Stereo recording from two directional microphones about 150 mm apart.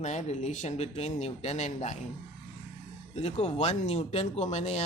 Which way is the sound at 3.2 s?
45° left (ahead or behind).